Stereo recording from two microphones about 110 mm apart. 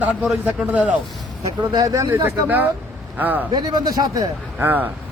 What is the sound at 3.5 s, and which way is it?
Speech, 40° right (ahead or behind).